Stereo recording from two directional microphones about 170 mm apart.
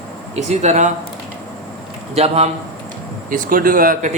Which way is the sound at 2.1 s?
40° right (ahead or behind).